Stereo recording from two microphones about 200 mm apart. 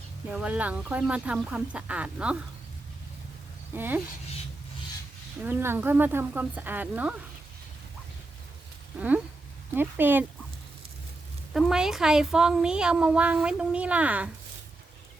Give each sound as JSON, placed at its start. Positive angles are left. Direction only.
{"t": 0.3, "sound": "speech", "side_deg": -5}
{"t": 3.8, "sound": "speech", "side_deg": -10}
{"t": 5.4, "sound": "speech", "side_deg": -10}
{"t": 9.0, "sound": "speech", "side_deg": -5}
{"t": 11.5, "sound": "a woman's voice", "side_deg": 0}